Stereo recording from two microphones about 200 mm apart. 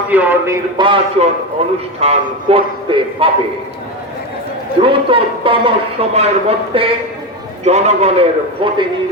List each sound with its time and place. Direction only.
0.1 s a man's voice: 10° right (ahead or behind)
0.8 s a man's voice: 25° right (ahead or behind)
4.8 s a man's voice: 25° right (ahead or behind)